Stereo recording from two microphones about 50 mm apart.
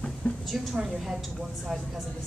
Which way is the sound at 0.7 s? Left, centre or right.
Centre.